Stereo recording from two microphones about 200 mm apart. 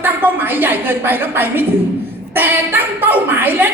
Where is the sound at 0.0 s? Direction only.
10° right (ahead or behind).